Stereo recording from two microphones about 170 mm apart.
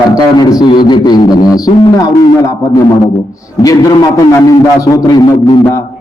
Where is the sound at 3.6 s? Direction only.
20° left (ahead or behind).